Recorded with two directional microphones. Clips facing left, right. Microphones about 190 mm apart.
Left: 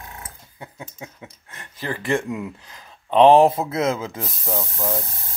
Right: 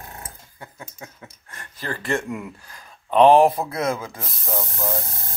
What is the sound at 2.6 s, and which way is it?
Speech, 20° left (ahead or behind).